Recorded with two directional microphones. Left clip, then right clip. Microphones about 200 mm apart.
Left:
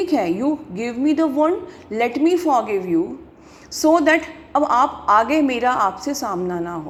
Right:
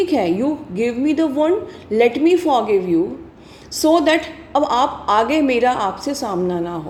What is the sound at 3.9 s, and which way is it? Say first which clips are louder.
A woman's voice: even; 10° left (ahead or behind).